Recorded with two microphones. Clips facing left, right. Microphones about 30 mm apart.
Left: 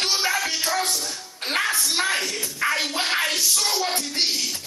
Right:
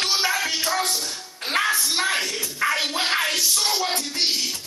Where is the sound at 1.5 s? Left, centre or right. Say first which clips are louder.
Right 1 dB; centre.